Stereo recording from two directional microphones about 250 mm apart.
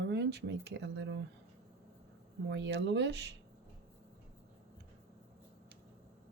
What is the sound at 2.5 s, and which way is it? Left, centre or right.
Speech, right.